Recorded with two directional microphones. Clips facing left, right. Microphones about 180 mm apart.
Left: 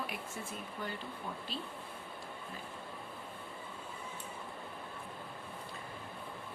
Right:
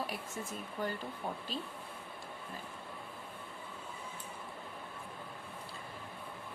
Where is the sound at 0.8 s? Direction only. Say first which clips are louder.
Right 5 dB; 45° right (ahead or behind).